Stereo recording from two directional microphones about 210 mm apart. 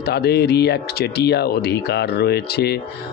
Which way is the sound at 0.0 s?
50° left (ahead or behind).